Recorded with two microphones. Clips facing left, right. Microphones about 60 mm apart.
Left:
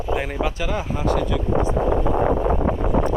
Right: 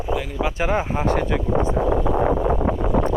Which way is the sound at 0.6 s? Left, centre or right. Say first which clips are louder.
Right 4 dB; right.